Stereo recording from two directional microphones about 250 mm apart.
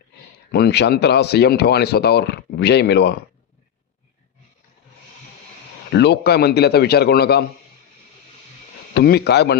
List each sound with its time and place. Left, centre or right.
0.5 s speech: left
5.9 s speech: left
9.0 s speech: left